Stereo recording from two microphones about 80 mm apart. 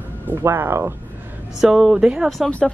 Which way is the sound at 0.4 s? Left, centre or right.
Right.